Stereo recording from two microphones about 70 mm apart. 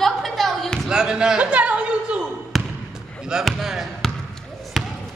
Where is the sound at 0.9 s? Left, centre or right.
Centre.